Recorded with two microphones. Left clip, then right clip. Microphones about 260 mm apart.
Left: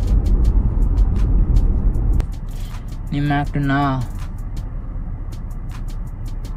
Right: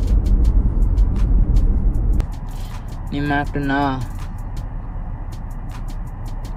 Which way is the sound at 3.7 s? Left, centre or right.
Right.